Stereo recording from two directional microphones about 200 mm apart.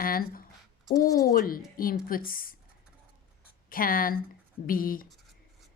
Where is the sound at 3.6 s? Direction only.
45° left (ahead or behind).